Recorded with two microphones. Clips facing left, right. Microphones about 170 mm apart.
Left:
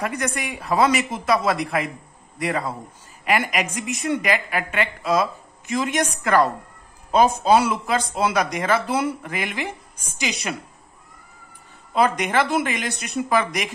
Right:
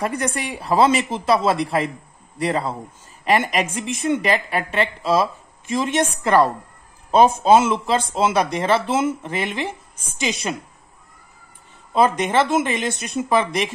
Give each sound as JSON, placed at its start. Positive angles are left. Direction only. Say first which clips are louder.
{"t": 0.0, "sound": "a woman's voice", "louder": "right 2 dB", "side_deg": -30}
{"t": 11.9, "sound": "a woman's voice", "louder": "right 2 dB", "side_deg": -20}